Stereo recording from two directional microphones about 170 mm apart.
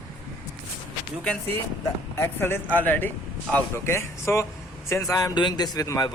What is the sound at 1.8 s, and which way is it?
A man's voice, 15° left (ahead or behind).